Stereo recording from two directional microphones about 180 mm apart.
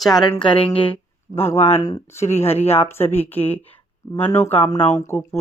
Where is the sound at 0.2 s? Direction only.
25° left (ahead or behind).